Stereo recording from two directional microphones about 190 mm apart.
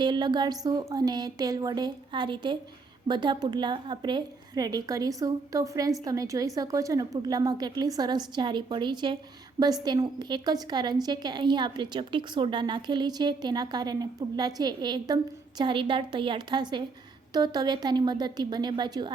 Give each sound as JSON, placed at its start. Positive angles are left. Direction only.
{"t": 0.0, "sound": "a woman's voice", "side_deg": -25}